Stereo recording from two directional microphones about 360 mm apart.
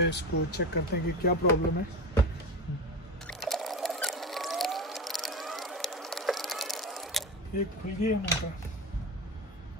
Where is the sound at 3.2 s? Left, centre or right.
Centre.